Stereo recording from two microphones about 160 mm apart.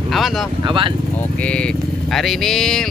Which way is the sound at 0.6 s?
30° right (ahead or behind).